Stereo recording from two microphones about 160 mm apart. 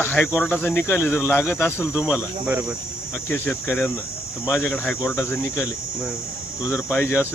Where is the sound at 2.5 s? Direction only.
10° right (ahead or behind).